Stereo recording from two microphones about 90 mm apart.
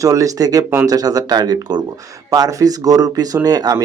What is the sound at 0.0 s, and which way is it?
Speech, 40° right (ahead or behind).